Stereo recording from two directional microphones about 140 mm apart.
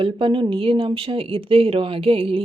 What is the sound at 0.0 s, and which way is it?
Speech, 40° right (ahead or behind).